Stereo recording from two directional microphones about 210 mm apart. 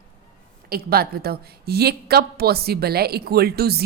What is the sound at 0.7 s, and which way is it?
A woman's voice, 45° right (ahead or behind).